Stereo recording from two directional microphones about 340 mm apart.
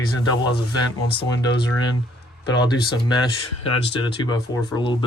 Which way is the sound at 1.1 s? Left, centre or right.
Centre.